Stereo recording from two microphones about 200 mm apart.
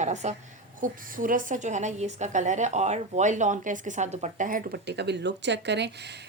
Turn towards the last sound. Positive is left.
turn(degrees=-60)  # may be behind; listen again after turning